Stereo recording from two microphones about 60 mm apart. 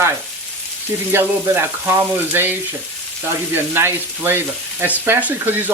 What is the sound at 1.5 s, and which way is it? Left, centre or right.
Frying, right.